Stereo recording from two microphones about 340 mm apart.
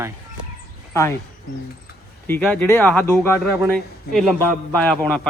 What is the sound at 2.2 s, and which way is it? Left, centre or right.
Speech, centre.